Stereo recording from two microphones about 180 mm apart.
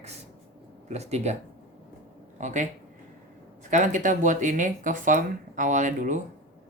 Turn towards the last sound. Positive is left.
turn(degrees=-45)  # may be behind; listen again after turning